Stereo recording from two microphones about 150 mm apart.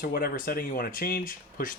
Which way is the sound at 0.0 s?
75° left (ahead or behind).